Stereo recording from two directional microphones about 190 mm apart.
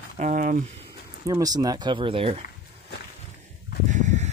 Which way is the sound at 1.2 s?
20° right (ahead or behind).